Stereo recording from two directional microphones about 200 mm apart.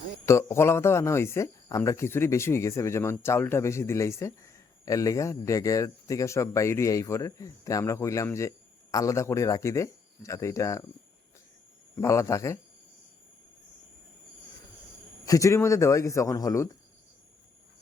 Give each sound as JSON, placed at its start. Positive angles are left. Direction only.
{"t": 0.3, "sound": "speech", "side_deg": 15}
{"t": 11.9, "sound": "speech", "side_deg": 15}
{"t": 15.2, "sound": "speech", "side_deg": 15}